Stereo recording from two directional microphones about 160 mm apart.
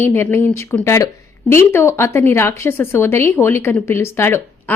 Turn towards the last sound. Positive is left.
turn(degrees=15)  # may be behind; listen again after turning